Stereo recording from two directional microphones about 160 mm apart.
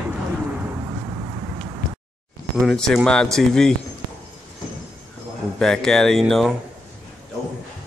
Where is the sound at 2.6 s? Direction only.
5° left (ahead or behind).